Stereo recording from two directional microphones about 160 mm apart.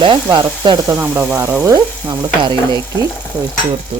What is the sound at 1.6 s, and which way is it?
Stir, 20° right (ahead or behind).